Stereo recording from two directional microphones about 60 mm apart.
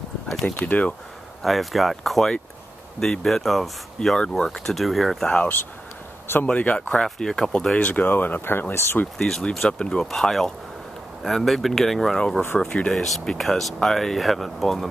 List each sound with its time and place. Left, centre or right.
0.3 s speech: centre
0.6 s speech: left
1.4 s speech: centre
6.4 s speech: left
6.9 s speech: centre
7.7 s speech: left
9.2 s speech: centre